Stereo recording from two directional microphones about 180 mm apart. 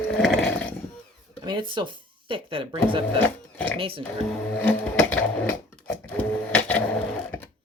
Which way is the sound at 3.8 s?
30° right (ahead or behind).